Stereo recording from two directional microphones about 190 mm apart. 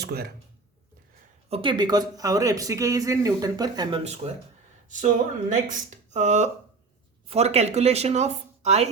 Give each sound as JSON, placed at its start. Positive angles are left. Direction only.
{"t": 0.0, "sound": "speech", "side_deg": -55}
{"t": 1.5, "sound": "speech", "side_deg": -30}